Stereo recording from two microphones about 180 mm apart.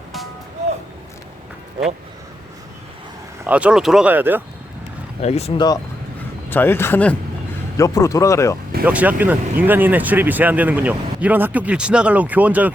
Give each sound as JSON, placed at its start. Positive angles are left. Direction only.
{"t": 3.4, "sound": "speech", "side_deg": -5}
{"t": 5.2, "sound": "speech", "side_deg": 35}
{"t": 5.5, "sound": "speech", "side_deg": 20}
{"t": 6.5, "sound": "speech", "side_deg": 10}
{"t": 8.8, "sound": "speech", "side_deg": -10}